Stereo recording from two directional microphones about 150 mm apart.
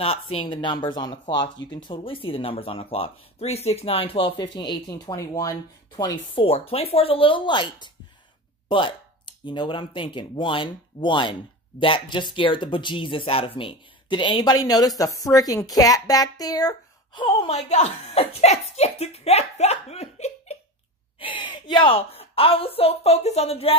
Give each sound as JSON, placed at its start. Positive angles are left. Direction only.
{"t": 0.0, "sound": "speech", "side_deg": 40}
{"t": 6.4, "sound": "speech", "side_deg": 40}
{"t": 17.5, "sound": "a woman's voice", "side_deg": 50}